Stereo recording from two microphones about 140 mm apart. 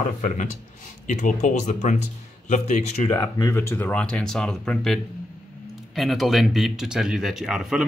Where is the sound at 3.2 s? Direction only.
25° left (ahead or behind).